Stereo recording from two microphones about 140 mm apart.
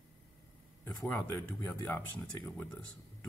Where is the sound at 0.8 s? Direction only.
15° left (ahead or behind).